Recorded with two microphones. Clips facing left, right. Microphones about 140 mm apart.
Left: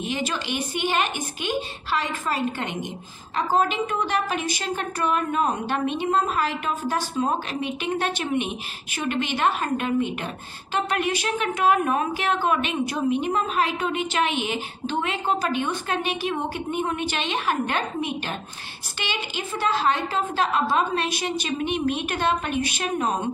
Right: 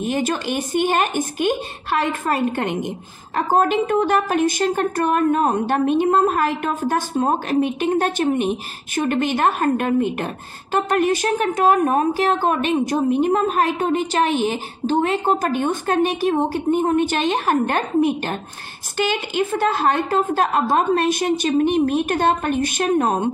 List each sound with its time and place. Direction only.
0.0 s a woman's voice: 50° right (ahead or behind)